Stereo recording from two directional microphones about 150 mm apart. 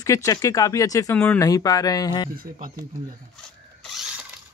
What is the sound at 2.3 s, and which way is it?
Speech, 75° right (ahead or behind).